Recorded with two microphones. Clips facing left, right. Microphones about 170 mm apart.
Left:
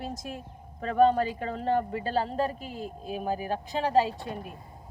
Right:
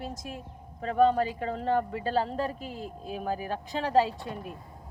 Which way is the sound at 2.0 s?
25° right (ahead or behind).